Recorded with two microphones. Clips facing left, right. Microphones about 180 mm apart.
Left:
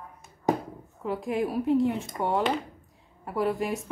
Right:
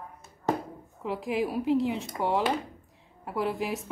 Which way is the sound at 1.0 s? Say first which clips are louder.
Left 1 dB; centre (ahead or behind).